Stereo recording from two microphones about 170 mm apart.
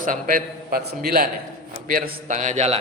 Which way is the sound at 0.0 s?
55° right (ahead or behind).